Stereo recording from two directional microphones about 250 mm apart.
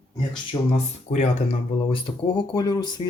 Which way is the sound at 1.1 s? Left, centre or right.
Left.